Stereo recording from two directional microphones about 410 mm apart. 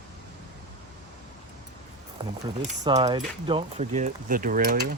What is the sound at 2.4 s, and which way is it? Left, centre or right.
Speech, centre.